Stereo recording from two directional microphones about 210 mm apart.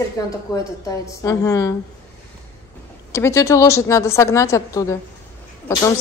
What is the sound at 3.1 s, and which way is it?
A woman's voice, 15° left (ahead or behind).